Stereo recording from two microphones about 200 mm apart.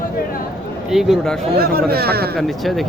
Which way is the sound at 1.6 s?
50° right (ahead or behind).